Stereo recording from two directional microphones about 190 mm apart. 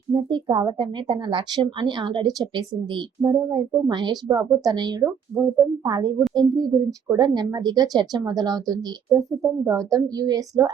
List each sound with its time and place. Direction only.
0.1 s a woman's voice: 25° right (ahead or behind)